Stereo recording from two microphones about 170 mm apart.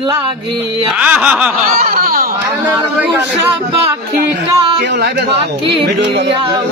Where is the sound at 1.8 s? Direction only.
60° right (ahead or behind).